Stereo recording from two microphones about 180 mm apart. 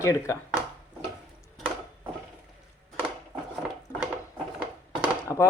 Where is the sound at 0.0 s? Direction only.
15° left (ahead or behind).